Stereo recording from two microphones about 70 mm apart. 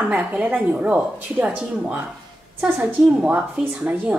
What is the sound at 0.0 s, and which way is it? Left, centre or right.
A woman's voice, centre.